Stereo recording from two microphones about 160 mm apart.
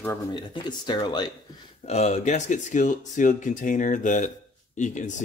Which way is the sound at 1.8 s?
40° left (ahead or behind).